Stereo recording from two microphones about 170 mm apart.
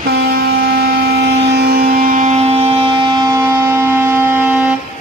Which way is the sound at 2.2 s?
40° right (ahead or behind).